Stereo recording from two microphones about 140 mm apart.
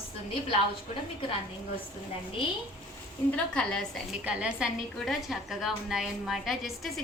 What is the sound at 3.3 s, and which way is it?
Speech, 5° left (ahead or behind).